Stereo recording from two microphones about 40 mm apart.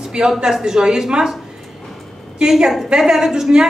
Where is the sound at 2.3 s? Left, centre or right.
Centre.